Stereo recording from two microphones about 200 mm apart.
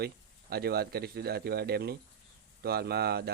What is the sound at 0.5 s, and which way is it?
Speech, 50° right (ahead or behind).